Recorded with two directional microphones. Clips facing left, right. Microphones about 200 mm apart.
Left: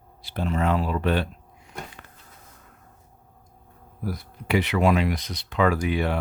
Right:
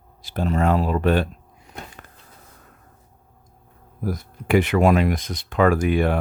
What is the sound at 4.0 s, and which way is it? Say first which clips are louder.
Speech: right 4 dB; 45° right (ahead or behind).